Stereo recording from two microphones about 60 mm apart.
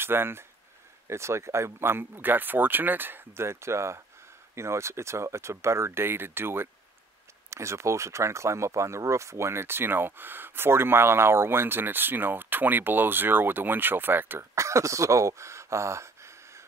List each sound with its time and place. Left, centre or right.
0.0 s speech: right
7.4 s speech: right
14.5 s speech: right